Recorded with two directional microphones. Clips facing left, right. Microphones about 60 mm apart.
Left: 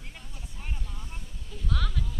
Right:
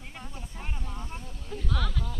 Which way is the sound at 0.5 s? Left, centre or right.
Right.